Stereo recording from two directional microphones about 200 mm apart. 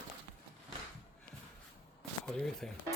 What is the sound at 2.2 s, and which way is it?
Speech, centre (ahead or behind).